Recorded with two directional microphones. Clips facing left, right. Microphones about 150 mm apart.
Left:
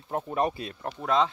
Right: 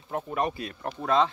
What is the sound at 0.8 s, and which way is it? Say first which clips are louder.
Speech: right 1 dB; 15° left (ahead or behind).